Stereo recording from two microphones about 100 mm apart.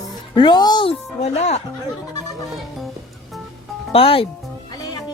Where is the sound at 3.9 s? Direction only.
70° left (ahead or behind).